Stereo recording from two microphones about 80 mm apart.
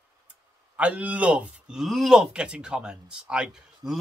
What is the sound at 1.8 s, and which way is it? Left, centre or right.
Speech, centre.